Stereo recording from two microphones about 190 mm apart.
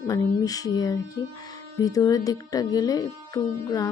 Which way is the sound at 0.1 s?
20° left (ahead or behind).